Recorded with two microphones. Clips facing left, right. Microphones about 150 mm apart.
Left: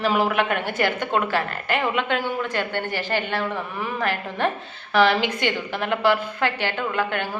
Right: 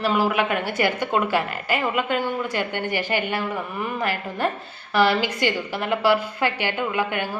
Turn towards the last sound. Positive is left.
turn(degrees=-10)  # may be behind; listen again after turning